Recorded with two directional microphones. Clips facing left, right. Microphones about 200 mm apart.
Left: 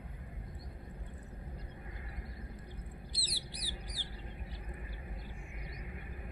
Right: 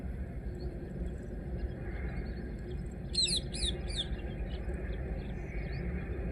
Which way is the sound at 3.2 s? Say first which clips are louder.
Right 8 dB; 15° left (ahead or behind).